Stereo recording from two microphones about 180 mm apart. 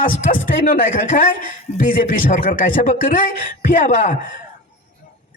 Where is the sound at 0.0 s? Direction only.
50° left (ahead or behind).